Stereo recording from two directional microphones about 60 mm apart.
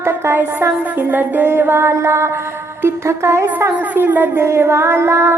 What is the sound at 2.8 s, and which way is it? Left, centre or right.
Female singing, right.